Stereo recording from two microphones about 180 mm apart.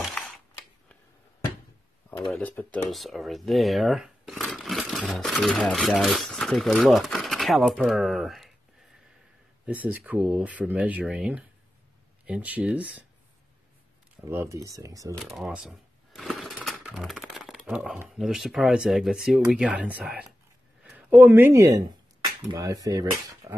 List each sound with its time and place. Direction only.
0.0 s camera: 5° left (ahead or behind)
2.3 s speech: 10° left (ahead or behind)
9.7 s speech: 10° right (ahead or behind)
14.2 s speech: 15° right (ahead or behind)
15.2 s speech: centre (ahead or behind); by 23.5 s 20° right (ahead or behind)